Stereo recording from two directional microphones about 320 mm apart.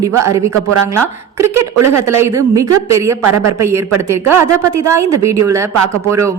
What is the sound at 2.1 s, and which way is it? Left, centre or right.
Speech, centre.